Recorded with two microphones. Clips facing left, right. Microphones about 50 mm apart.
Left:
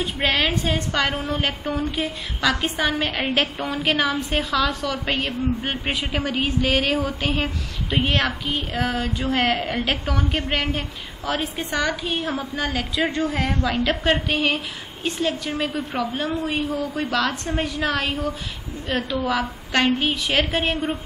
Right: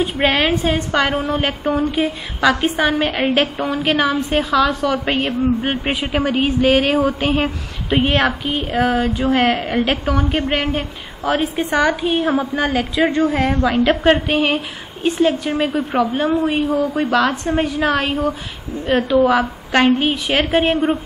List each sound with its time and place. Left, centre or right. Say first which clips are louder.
0.0 s a woman's voice: right 5 dB; centre
5.0 s a woman's voice: right 6 dB; right
13.0 s a woman's voice: right 7 dB; centre
16.1 s a man's voice: right 7 dB; centre; by 21.0 s right